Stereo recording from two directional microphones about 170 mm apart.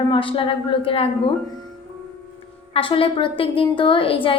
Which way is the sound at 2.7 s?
30° left (ahead or behind).